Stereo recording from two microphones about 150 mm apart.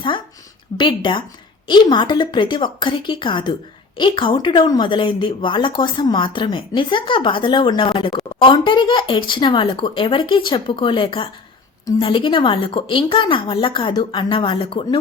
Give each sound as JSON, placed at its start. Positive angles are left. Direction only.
{"t": 0.8, "sound": "a woman's voice", "side_deg": 30}